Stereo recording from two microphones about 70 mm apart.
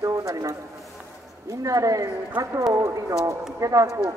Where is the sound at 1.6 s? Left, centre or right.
Right.